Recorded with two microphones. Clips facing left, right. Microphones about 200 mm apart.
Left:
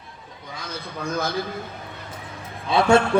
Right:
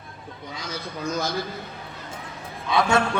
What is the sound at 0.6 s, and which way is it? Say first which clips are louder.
Speech: even; 55° left (ahead or behind).